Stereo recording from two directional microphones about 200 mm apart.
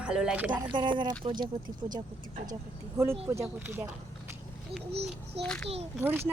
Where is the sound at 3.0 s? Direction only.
15° right (ahead or behind).